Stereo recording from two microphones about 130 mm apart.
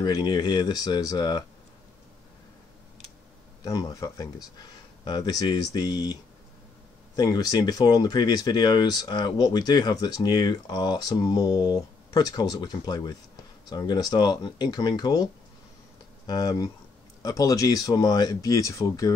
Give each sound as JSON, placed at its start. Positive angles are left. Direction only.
{"t": 0.0, "sound": "speech", "side_deg": 35}
{"t": 3.6, "sound": "speech", "side_deg": 30}
{"t": 7.2, "sound": "speech", "side_deg": 30}
{"t": 16.3, "sound": "speech", "side_deg": 30}